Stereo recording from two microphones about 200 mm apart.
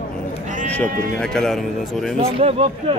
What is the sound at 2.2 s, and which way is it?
Speech, 30° right (ahead or behind).